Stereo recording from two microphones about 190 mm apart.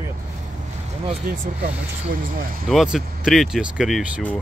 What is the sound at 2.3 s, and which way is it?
Speech, 50° right (ahead or behind).